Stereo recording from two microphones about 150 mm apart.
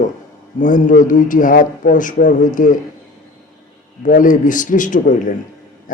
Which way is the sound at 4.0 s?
60° left (ahead or behind).